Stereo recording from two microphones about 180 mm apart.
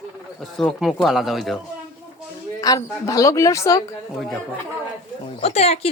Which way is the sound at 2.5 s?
20° left (ahead or behind).